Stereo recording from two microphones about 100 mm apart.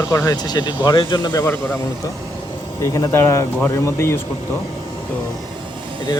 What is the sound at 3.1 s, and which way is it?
Speech, 30° left (ahead or behind).